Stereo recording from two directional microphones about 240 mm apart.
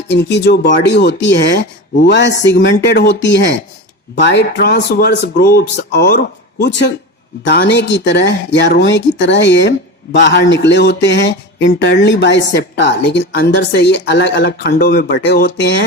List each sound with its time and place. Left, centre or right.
0.1 s speech: left